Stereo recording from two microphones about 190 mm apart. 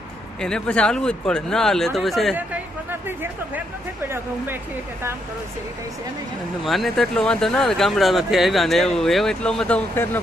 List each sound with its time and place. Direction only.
0.4 s speech: 5° left (ahead or behind)
6.7 s speech: centre (ahead or behind)